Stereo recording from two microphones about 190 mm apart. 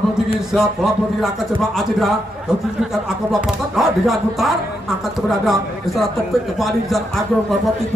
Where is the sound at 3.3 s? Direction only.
Centre (ahead or behind).